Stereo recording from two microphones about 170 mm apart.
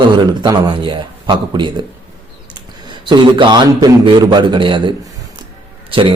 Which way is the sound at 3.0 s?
25° right (ahead or behind).